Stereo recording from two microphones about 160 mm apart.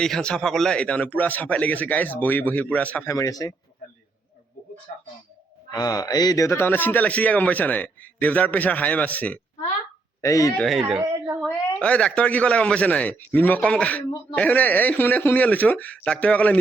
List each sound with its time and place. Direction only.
0.0 s a man's voice: 5° left (ahead or behind); by 3.5 s 20° left (ahead or behind)
5.7 s a man's voice: 25° left (ahead or behind)
10.2 s speech: 20° left (ahead or behind)
11.0 s a sound: 20° right (ahead or behind)
11.3 s a man's voice: 5° left (ahead or behind)